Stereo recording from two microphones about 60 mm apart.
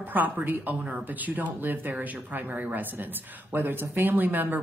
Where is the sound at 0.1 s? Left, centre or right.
Right.